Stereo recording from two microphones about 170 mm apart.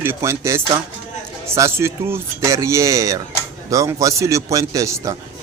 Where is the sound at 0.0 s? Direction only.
15° right (ahead or behind).